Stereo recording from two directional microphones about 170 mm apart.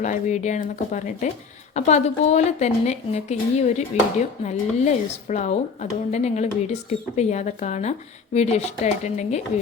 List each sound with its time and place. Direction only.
0.0 s a woman's voice: 45° left (ahead or behind)